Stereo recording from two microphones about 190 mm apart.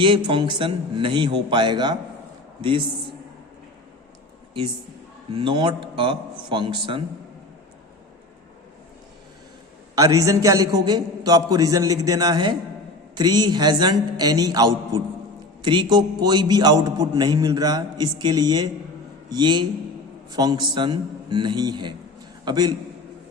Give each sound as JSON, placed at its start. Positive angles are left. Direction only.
{"t": 0.0, "sound": "a man's voice", "side_deg": -25}
{"t": 5.3, "sound": "a man's voice", "side_deg": -25}
{"t": 9.9, "sound": "a man's voice", "side_deg": -20}